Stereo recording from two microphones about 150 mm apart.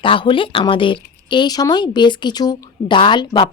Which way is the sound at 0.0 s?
35° left (ahead or behind).